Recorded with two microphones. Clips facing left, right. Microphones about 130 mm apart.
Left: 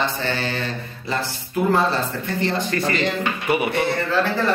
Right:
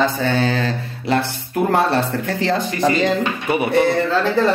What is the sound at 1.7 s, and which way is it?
Speech, 65° right (ahead or behind).